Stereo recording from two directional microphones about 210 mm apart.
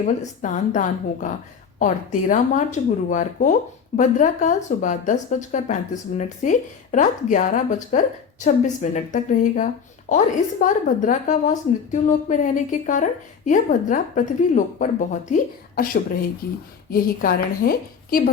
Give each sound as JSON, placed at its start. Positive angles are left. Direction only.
{"t": 0.0, "sound": "a woman's voice", "side_deg": 35}
{"t": 16.9, "sound": "a woman's voice", "side_deg": 45}